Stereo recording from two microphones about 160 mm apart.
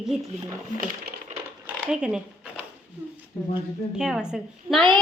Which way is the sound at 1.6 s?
5° right (ahead or behind).